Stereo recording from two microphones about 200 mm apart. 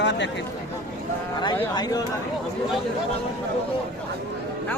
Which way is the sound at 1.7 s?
20° left (ahead or behind).